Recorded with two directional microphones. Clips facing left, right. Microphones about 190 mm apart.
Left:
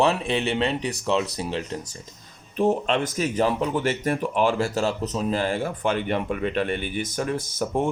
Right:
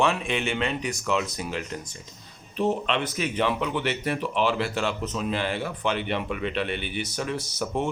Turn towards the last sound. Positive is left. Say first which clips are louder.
# left 3 dB
turn(degrees=50)  # may be behind; listen again after turning